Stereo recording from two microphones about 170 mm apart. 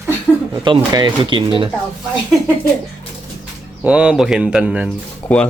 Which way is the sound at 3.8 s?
5° right (ahead or behind).